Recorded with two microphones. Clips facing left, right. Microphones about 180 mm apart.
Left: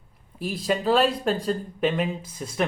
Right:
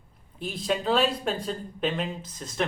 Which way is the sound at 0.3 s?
5° left (ahead or behind).